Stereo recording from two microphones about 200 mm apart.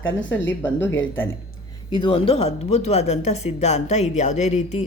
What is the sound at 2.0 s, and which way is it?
Speech, 30° left (ahead or behind).